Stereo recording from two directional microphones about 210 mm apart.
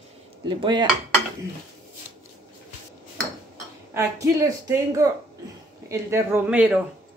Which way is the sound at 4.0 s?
15° right (ahead or behind).